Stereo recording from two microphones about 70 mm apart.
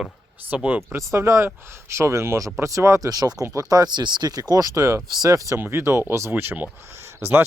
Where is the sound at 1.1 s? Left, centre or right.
Right.